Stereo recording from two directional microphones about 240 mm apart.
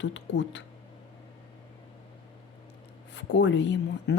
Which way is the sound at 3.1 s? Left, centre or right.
Left.